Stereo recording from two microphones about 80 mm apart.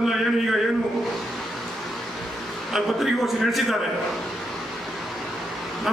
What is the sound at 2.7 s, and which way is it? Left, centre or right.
A man's voice, centre.